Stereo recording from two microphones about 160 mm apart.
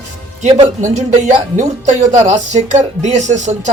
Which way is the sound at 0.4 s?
45° right (ahead or behind).